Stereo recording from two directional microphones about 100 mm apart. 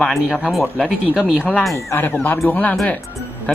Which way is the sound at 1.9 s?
20° left (ahead or behind).